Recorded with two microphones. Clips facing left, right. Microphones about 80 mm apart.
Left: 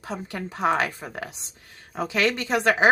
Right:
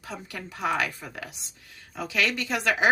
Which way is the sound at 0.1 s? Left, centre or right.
Left.